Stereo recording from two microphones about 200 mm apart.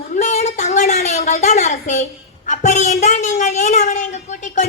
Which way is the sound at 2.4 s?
35° left (ahead or behind).